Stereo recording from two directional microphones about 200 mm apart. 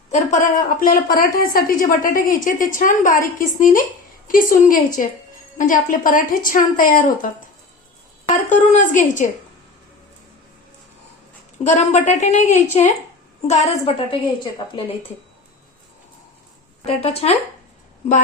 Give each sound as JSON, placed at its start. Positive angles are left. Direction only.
{"t": 0.1, "sound": "a woman's voice", "side_deg": 35}
{"t": 8.4, "sound": "a woman's voice", "side_deg": 35}
{"t": 11.6, "sound": "a woman's voice", "side_deg": 35}
{"t": 16.8, "sound": "a woman's voice", "side_deg": 30}